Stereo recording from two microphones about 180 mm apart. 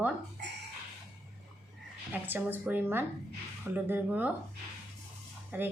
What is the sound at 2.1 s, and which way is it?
A woman's voice, 10° right (ahead or behind).